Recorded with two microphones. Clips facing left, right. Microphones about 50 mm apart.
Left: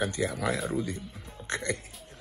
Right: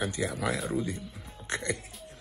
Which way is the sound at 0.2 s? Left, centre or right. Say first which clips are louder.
Left 1 dB; centre.